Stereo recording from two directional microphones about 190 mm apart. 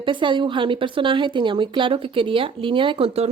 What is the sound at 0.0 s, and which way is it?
Speech, 25° right (ahead or behind).